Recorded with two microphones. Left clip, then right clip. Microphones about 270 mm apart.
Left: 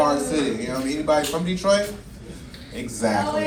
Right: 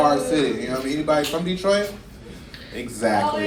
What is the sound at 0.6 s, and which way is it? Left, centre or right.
Speech, centre.